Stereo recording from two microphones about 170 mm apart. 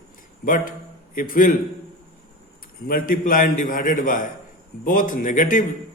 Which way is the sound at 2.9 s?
55° left (ahead or behind).